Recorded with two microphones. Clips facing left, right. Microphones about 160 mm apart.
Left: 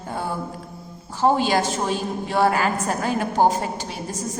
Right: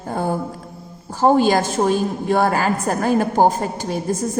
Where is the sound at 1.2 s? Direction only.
45° right (ahead or behind).